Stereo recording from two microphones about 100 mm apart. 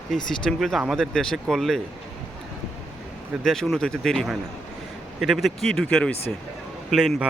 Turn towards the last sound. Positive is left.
turn(degrees=-5)  # may be behind; listen again after turning